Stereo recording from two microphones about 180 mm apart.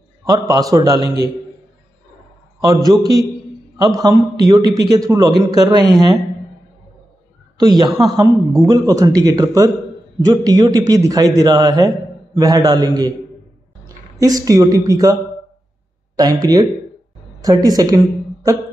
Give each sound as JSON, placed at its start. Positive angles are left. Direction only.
{"t": 0.2, "sound": "a man's voice", "side_deg": -20}
{"t": 2.6, "sound": "a man's voice", "side_deg": -20}
{"t": 7.5, "sound": "a man's voice", "side_deg": -20}
{"t": 16.2, "sound": "a man's voice", "side_deg": -20}